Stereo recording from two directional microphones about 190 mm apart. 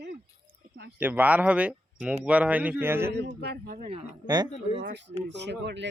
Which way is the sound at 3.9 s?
25° right (ahead or behind).